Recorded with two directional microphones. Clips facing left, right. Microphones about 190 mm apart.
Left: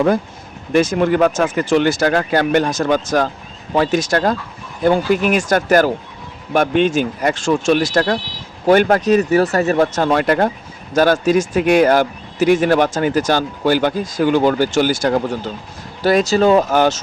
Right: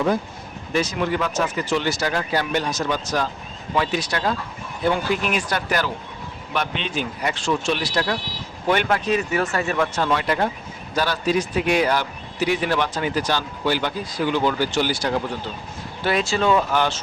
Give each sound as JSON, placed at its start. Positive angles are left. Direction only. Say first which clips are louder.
{"t": 0.7, "sound": "speech", "louder": "left 8 dB", "side_deg": 50}